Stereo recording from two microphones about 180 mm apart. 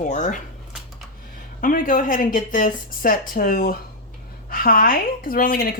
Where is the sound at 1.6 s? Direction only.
50° left (ahead or behind).